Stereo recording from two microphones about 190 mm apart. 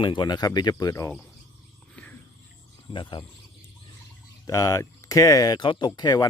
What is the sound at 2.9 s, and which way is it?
Speech, 25° left (ahead or behind).